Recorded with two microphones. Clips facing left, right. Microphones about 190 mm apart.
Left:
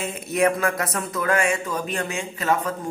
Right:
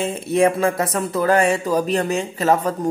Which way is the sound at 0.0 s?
30° right (ahead or behind).